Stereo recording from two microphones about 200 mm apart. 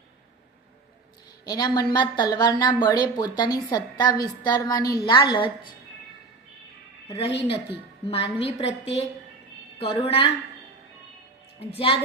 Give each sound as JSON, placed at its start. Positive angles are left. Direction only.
{"t": 1.5, "sound": "a woman's voice", "side_deg": 20}
{"t": 8.0, "sound": "a woman's voice", "side_deg": 30}
{"t": 11.6, "sound": "a woman's voice", "side_deg": 30}